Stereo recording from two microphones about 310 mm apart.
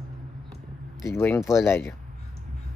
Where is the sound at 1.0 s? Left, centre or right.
Centre.